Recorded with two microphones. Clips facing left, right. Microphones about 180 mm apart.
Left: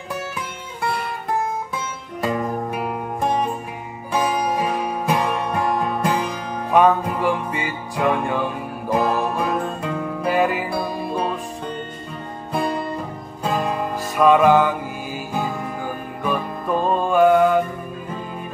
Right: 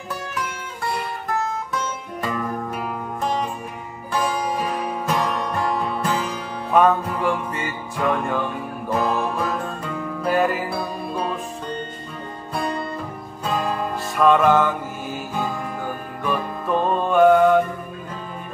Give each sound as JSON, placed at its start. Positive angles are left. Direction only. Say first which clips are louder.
{"t": 2.2, "sound": "music", "louder": "left 4 dB", "side_deg": 25}
{"t": 4.1, "sound": "music", "louder": "left 2 dB", "side_deg": 15}
{"t": 6.7, "sound": "music", "louder": "left 1 dB", "side_deg": 0}
{"t": 10.2, "sound": "music", "louder": "even", "side_deg": 0}
{"t": 13.6, "sound": "music", "louder": "right 1 dB", "side_deg": 5}
{"t": 16.3, "sound": "music", "louder": "left 1 dB", "side_deg": 5}
{"t": 16.9, "sound": "mantra", "louder": "even", "side_deg": 5}